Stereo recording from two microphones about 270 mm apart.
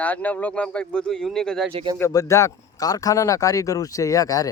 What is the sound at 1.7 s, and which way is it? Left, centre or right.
Speech, right.